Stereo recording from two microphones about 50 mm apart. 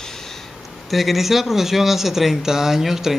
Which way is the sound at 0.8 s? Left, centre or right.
Centre.